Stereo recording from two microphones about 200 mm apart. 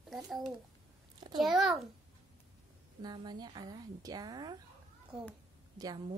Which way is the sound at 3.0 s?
20° right (ahead or behind).